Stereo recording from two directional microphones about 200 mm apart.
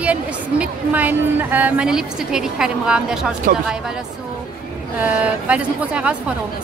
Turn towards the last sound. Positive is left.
turn(degrees=-5)  # may be behind; listen again after turning